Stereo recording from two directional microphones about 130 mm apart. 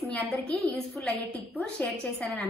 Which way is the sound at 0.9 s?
5° left (ahead or behind).